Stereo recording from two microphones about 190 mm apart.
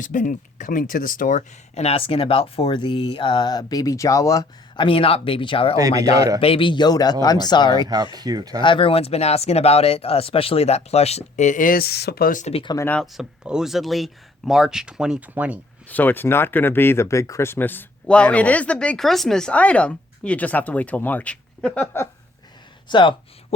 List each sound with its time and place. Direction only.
0.0 s speech: 45° left (ahead or behind); by 5.7 s 25° left (ahead or behind)
6.1 s speech: 20° right (ahead or behind)
6.4 s speech: 30° left (ahead or behind)
8.1 s speech: 20° right (ahead or behind)
8.6 s speech: 25° left (ahead or behind)
12.7 s speech: 10° left (ahead or behind); by 15.5 s 5° right (ahead or behind)
15.9 s speech: 10° left (ahead or behind)
22.9 s speech: 25° left (ahead or behind)